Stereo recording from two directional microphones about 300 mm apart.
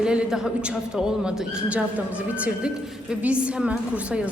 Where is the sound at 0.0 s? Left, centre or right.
Centre.